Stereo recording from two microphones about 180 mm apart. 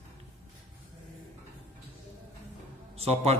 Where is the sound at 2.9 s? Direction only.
35° right (ahead or behind).